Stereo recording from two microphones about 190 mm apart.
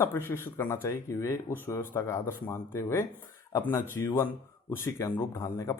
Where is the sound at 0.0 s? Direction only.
10° left (ahead or behind).